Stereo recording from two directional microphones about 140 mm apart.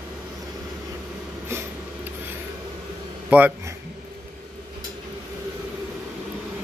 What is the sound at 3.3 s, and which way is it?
Speech, 15° right (ahead or behind).